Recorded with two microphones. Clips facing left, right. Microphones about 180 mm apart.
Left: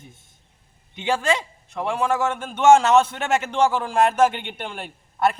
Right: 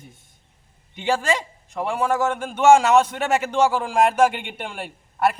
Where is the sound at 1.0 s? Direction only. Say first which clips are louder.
Even; 10° right (ahead or behind).